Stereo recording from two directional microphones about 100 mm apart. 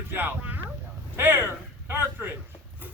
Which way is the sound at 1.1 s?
20° right (ahead or behind).